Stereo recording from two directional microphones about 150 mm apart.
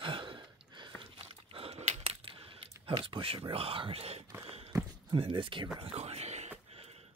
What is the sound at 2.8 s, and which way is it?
Speech, 35° right (ahead or behind).